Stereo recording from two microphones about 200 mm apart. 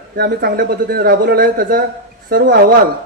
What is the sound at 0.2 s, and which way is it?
A man's voice, 50° right (ahead or behind).